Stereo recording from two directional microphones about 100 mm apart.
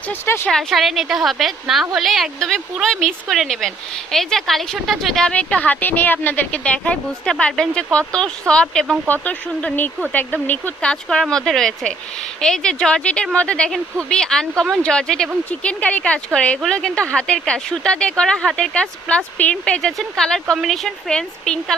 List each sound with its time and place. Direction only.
0.1 s speech: 25° left (ahead or behind)
0.4 s a woman's voice: 5° left (ahead or behind)
9.0 s speech: 15° left (ahead or behind)